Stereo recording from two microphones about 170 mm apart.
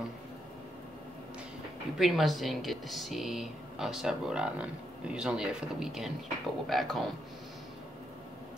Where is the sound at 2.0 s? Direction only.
Centre (ahead or behind).